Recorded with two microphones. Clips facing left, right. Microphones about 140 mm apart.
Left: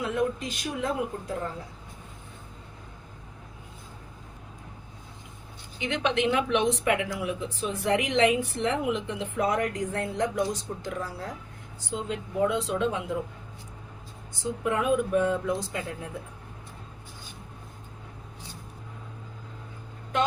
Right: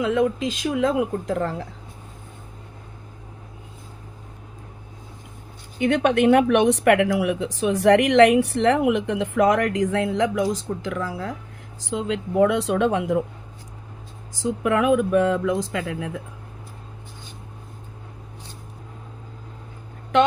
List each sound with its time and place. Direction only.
0.1 s speech: 90° right
5.8 s a woman's voice: 55° right (ahead or behind); by 10.5 s 90° right
11.8 s a woman's voice: 90° right; by 13.2 s 65° right (ahead or behind)
14.4 s speech: 90° right